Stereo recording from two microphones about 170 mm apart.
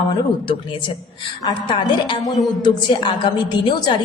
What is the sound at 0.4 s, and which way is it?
A woman's voice, 30° left (ahead or behind).